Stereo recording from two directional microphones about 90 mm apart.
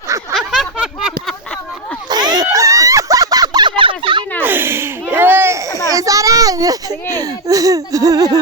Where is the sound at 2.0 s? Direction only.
50° right (ahead or behind).